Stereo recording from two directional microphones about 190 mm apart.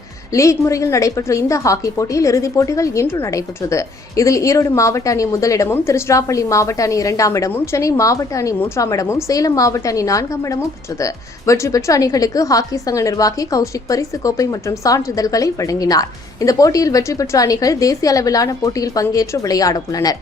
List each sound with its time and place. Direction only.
0.3 s a woman's voice: 15° left (ahead or behind)